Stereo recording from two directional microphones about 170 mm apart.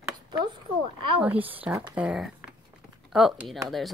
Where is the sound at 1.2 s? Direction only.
10° right (ahead or behind).